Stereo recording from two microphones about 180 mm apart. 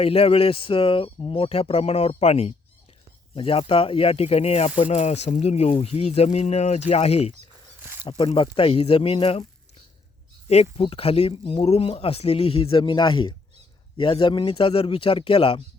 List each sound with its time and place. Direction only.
0.0 s speech: 35° left (ahead or behind)
10.5 s speech: 35° left (ahead or behind)